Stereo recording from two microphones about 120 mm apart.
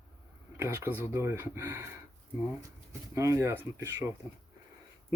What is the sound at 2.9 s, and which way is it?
Speech, 25° right (ahead or behind).